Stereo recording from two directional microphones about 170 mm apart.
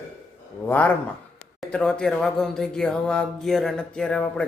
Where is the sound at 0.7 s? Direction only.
10° left (ahead or behind).